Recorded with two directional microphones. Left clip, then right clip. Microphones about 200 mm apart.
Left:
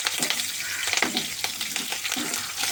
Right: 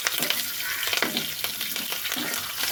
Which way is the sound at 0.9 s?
5° right (ahead or behind).